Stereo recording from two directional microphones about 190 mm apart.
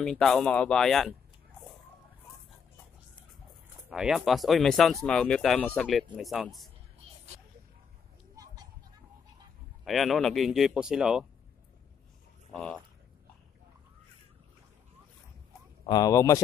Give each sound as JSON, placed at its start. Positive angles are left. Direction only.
{"t": 0.0, "sound": "speech", "side_deg": 5}
{"t": 3.9, "sound": "speech", "side_deg": -5}
{"t": 9.8, "sound": "speech", "side_deg": 0}
{"t": 12.5, "sound": "speech", "side_deg": 5}
{"t": 15.9, "sound": "speech", "side_deg": 20}